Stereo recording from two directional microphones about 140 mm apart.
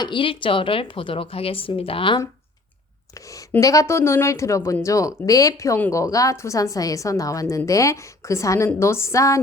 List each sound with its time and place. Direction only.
0.0 s a woman's voice: 35° left (ahead or behind)
3.2 s a woman's voice: 25° left (ahead or behind)